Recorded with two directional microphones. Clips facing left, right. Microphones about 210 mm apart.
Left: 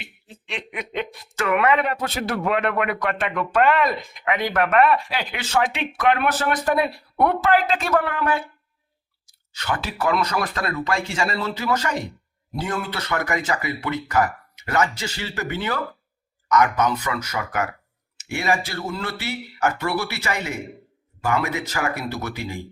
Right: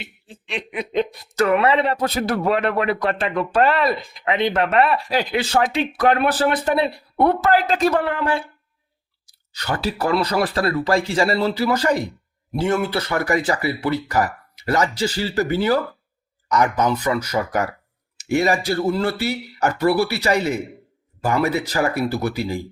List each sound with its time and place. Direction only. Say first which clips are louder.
0.3 s speech: right 4 dB; 35° right (ahead or behind)
7.4 s speech: right 3 dB; 40° right (ahead or behind)